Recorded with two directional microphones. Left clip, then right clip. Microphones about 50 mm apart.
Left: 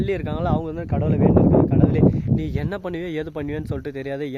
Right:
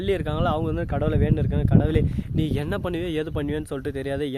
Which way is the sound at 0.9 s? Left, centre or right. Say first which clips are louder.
Left 3 dB; right.